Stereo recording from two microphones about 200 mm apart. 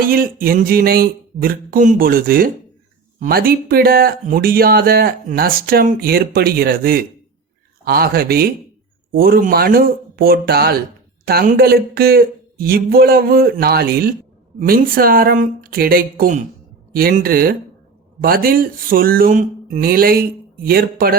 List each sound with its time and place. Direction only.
0.0 s speech: 45° right (ahead or behind)